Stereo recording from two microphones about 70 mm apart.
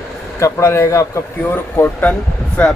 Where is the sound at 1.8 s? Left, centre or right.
Left.